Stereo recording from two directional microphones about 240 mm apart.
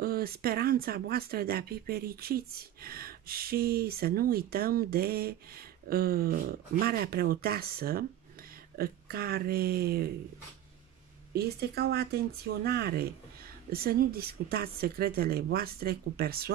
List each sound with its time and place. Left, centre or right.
0.0 s speech: right
11.3 s speech: right